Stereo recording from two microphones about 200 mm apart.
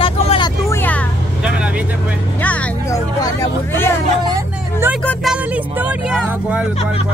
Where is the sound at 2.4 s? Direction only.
5° left (ahead or behind).